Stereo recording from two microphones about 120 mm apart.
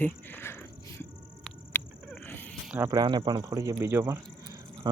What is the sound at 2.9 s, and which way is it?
Speech, 35° right (ahead or behind).